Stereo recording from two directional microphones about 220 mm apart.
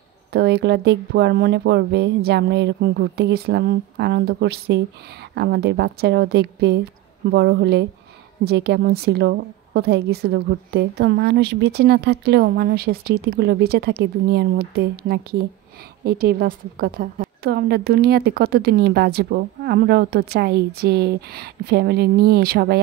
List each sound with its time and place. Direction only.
0.3 s a woman's voice: 50° right (ahead or behind)